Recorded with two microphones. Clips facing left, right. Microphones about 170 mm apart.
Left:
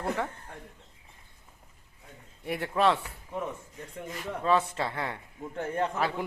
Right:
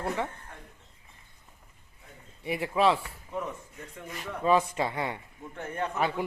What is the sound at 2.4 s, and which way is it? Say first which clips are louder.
Speech: right 1 dB; centre (ahead or behind).